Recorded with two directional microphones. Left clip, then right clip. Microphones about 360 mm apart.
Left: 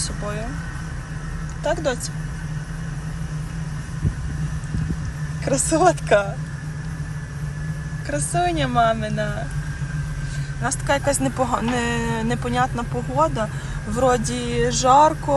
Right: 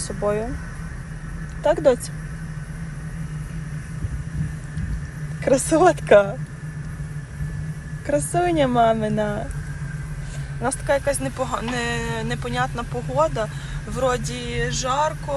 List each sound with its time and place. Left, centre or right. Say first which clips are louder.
1.6 s speech: right 5 dB; centre
5.6 s speech: even; right
8.0 s speech: right 1 dB; centre
10.6 s speech: even; centre